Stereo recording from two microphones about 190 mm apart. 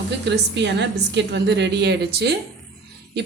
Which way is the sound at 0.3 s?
65° right (ahead or behind).